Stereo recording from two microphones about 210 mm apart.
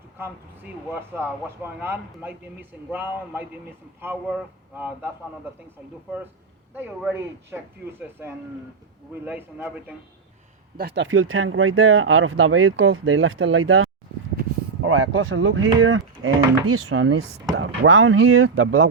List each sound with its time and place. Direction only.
0.9 s speech: 10° right (ahead or behind)
6.7 s speech: 10° right (ahead or behind)
10.8 s speech: 55° right (ahead or behind); by 18.9 s 75° right (ahead or behind)